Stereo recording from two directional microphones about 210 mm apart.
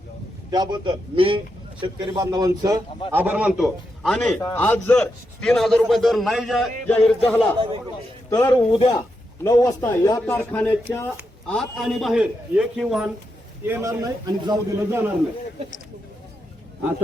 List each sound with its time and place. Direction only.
0.5 s a man's voice: 20° right (ahead or behind); by 13.1 s centre (ahead or behind)
13.7 s a man's voice: 15° right (ahead or behind)